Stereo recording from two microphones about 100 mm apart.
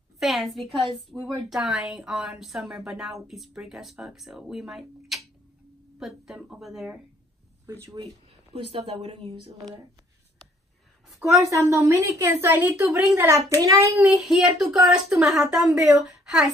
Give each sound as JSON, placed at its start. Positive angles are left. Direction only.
{"t": 0.2, "sound": "a woman's voice", "side_deg": 0}
{"t": 8.6, "sound": "speech", "side_deg": -90}
{"t": 11.1, "sound": "a woman's voice", "side_deg": -30}
{"t": 13.9, "sound": "a woman's voice", "side_deg": -5}